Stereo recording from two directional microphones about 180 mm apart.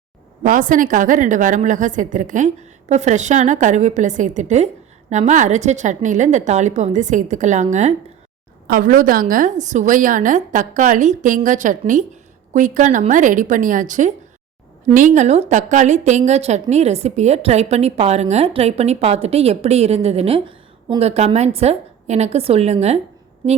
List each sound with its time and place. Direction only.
0.4 s a woman's voice: 45° right (ahead or behind)